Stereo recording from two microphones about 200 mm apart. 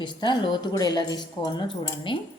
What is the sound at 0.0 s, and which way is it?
A woman's voice, 25° left (ahead or behind).